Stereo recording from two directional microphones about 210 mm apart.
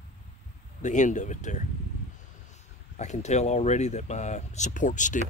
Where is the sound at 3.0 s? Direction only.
35° left (ahead or behind).